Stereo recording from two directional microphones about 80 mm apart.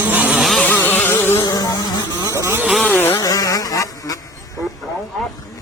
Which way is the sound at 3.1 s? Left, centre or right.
Left.